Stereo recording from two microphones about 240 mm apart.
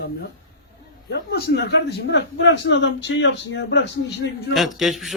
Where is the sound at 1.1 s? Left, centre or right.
Left.